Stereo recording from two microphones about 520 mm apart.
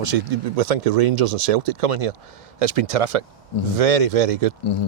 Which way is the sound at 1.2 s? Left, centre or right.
Right.